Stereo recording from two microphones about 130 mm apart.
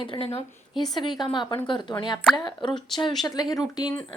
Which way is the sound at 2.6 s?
5° left (ahead or behind).